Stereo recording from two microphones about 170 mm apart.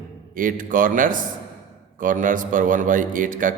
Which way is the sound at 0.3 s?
50° right (ahead or behind).